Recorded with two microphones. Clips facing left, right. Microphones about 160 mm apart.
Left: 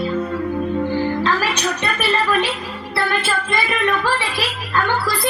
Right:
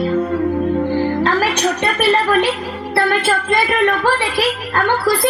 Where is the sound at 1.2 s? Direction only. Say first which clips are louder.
Right 4 dB; 60° right (ahead or behind).